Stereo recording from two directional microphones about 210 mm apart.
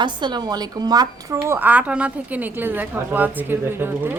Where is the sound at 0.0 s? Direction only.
20° right (ahead or behind).